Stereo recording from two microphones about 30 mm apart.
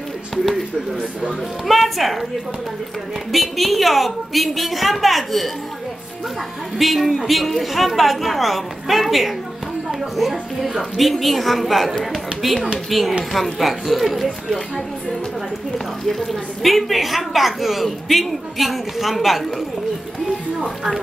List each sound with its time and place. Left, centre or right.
1.7 s a woman's voice: centre
3.3 s a woman's voice: centre
6.8 s a woman's voice: centre
12.9 s a woman's voice: centre
16.1 s a woman's voice: centre
20.6 s a woman's voice: centre